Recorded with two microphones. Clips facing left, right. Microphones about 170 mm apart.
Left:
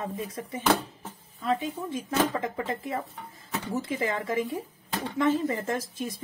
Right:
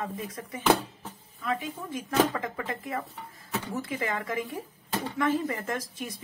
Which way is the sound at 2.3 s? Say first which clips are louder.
Left 3 dB; 25° left (ahead or behind).